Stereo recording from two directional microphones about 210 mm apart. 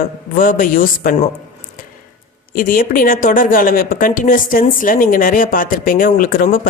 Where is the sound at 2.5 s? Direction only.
40° left (ahead or behind).